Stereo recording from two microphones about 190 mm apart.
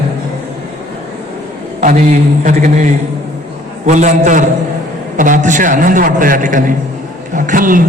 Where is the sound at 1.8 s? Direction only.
40° right (ahead or behind).